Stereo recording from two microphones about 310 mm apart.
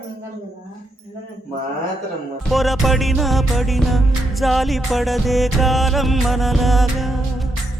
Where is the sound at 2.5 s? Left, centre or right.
Centre.